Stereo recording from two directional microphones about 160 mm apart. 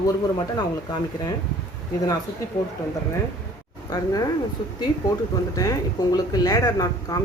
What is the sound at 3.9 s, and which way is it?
Speech, 25° left (ahead or behind).